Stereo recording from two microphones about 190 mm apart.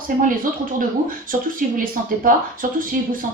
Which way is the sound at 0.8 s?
45° right (ahead or behind).